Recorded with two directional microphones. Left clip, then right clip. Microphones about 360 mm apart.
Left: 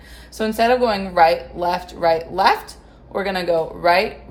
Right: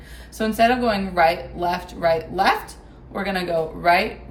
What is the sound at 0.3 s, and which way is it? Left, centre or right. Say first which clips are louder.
Speech: left 2 dB; centre.